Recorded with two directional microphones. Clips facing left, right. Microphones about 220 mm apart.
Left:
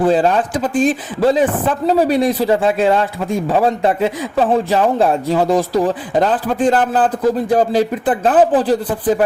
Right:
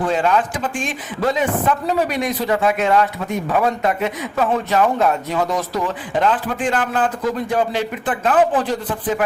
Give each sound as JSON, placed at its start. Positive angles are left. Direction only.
{"t": 0.0, "sound": "speech", "side_deg": 35}